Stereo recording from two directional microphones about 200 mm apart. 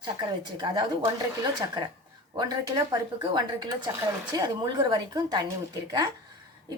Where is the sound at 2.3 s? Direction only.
20° right (ahead or behind).